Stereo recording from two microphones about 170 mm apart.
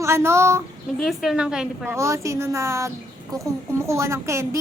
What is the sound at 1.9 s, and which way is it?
A woman's voice, 15° right (ahead or behind).